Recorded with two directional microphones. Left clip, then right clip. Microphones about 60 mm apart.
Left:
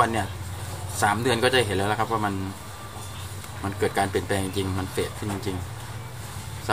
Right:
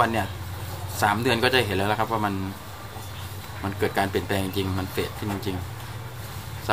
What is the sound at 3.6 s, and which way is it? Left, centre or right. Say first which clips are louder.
Speech: even; centre.